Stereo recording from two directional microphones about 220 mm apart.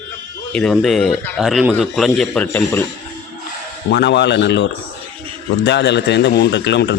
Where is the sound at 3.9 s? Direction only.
50° left (ahead or behind).